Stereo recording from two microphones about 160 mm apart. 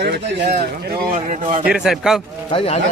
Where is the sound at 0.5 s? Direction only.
65° right (ahead or behind).